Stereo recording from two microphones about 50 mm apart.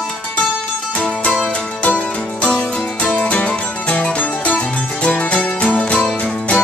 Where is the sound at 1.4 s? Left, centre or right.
Left.